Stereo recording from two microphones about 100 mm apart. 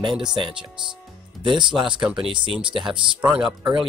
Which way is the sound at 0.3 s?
55° right (ahead or behind).